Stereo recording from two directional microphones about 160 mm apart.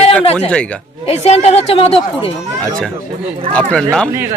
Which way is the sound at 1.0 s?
40° left (ahead or behind).